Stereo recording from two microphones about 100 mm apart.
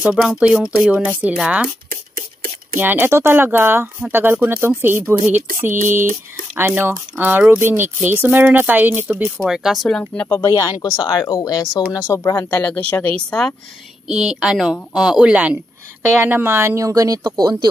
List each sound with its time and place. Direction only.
0.0 s speech: 5° right (ahead or behind)
2.8 s speech: 20° right (ahead or behind)
9.4 s speech: 5° right (ahead or behind)
9.8 s speech: 10° left (ahead or behind)
10.4 s speech: 40° left (ahead or behind)
13.3 s speech: 10° left (ahead or behind)
14.0 s speech: 5° right (ahead or behind)
16.2 s speech: 20° right (ahead or behind); by 17.6 s 40° right (ahead or behind)